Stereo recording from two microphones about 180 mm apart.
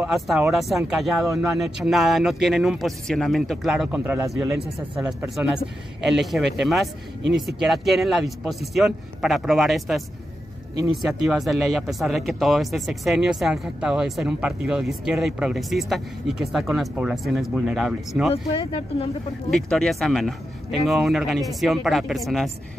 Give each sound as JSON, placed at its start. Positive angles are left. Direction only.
{"t": 0.0, "sound": "speech", "side_deg": -5}
{"t": 19.5, "sound": "speech", "side_deg": 0}